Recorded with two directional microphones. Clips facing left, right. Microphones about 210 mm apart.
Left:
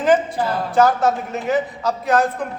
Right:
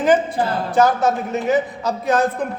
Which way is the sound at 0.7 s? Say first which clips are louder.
Left 1 dB; 20° right (ahead or behind).